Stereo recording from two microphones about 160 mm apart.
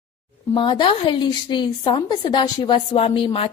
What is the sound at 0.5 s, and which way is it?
A woman's voice, 30° left (ahead or behind).